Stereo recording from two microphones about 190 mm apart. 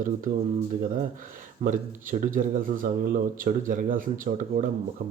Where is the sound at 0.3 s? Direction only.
50° right (ahead or behind).